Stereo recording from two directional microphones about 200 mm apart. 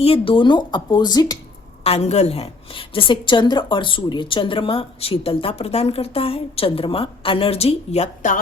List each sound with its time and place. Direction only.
0.0 s a woman's voice: 25° left (ahead or behind)
1.8 s a woman's voice: 30° left (ahead or behind)